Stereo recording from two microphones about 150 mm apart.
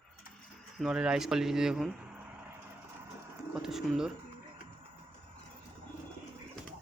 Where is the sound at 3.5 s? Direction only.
5° right (ahead or behind).